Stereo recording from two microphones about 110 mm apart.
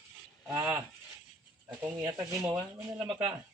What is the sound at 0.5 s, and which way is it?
Speech, 20° right (ahead or behind).